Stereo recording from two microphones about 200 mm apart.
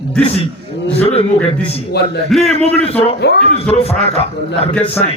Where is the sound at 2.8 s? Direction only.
30° left (ahead or behind).